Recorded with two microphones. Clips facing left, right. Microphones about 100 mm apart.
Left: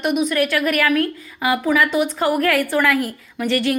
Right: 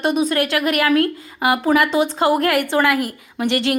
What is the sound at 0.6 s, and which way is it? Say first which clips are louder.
A woman's voice: right 2 dB; 20° right (ahead or behind).